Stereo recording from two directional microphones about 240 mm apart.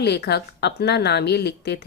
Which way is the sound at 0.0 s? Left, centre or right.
Left.